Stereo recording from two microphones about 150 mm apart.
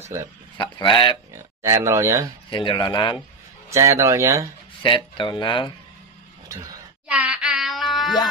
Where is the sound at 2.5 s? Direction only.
30° left (ahead or behind).